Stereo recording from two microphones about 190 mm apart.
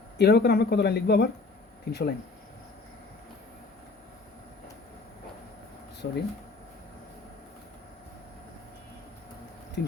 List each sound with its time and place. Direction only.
0.2 s speech: 60° left (ahead or behind)
6.0 s speech: 60° left (ahead or behind)
9.8 s speech: 55° left (ahead or behind)